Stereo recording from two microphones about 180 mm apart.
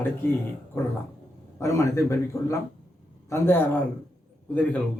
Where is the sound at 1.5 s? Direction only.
15° left (ahead or behind).